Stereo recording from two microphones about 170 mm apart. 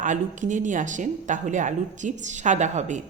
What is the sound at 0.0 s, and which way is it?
A woman's voice, 45° right (ahead or behind).